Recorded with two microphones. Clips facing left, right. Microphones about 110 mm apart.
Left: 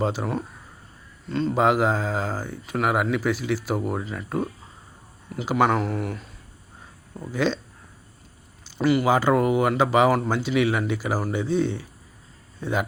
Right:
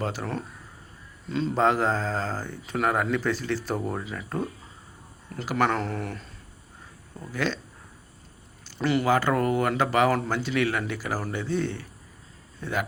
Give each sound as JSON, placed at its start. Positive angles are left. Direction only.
{"t": 0.0, "sound": "speech", "side_deg": 15}
{"t": 1.3, "sound": "speech", "side_deg": 0}
{"t": 1.5, "sound": "speech", "side_deg": 10}
{"t": 5.5, "sound": "speech", "side_deg": 15}
{"t": 7.3, "sound": "speech", "side_deg": 20}
{"t": 8.8, "sound": "speech", "side_deg": 5}
{"t": 9.0, "sound": "speech", "side_deg": 15}